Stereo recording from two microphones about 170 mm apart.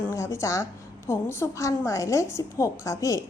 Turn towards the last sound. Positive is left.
turn(degrees=20)  # may be behind; listen again after turning